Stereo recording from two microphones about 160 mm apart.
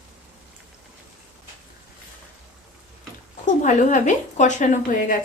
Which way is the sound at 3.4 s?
50° left (ahead or behind).